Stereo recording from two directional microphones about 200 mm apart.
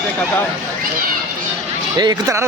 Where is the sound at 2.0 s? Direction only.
20° right (ahead or behind).